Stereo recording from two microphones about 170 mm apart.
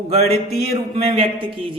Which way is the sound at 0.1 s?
40° right (ahead or behind).